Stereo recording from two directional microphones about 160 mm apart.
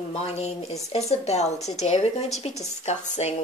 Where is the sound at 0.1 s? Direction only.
40° left (ahead or behind).